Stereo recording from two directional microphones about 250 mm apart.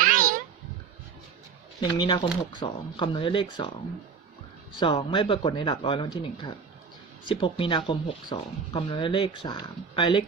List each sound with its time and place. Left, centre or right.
0.0 s a sound: right
1.8 s speech: centre
4.8 s speech: centre